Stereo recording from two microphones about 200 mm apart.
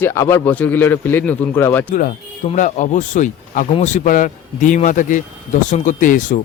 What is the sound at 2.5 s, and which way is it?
Speech, 40° left (ahead or behind).